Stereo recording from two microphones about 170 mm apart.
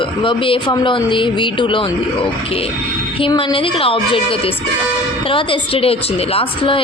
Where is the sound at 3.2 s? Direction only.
30° left (ahead or behind).